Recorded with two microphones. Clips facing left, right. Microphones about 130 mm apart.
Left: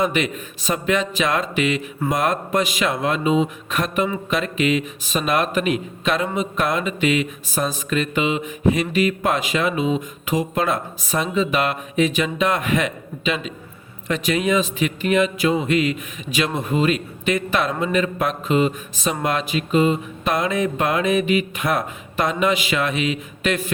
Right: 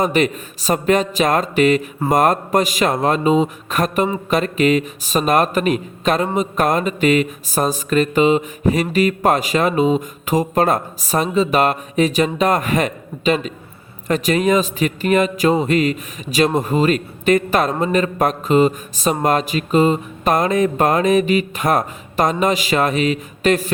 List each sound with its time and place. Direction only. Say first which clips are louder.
0.0 s speech: right 4 dB; 40° right (ahead or behind)